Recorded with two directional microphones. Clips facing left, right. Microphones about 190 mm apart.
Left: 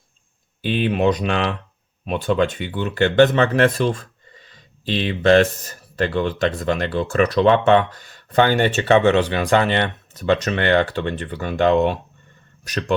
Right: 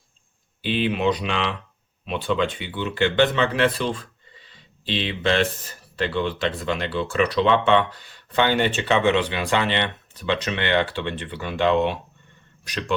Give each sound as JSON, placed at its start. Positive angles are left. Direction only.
{"t": 0.6, "sound": "speech", "side_deg": 45}